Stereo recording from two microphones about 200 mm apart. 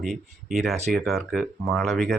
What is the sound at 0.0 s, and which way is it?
Speech, centre (ahead or behind).